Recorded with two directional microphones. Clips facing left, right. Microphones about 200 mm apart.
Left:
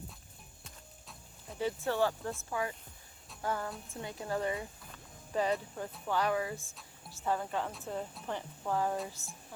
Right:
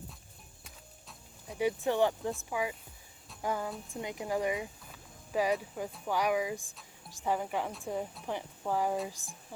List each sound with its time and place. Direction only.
0.6 s music: centre (ahead or behind)
1.5 s speech: 15° right (ahead or behind)